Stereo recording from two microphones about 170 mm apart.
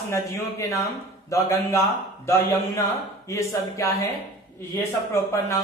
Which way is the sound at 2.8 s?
15° left (ahead or behind).